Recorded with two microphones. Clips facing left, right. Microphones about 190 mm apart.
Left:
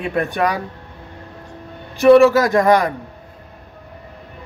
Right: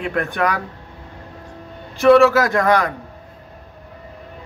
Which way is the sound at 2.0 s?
15° left (ahead or behind).